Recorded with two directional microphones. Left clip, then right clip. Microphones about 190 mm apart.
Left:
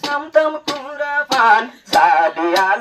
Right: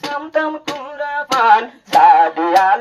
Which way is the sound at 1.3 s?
25° left (ahead or behind).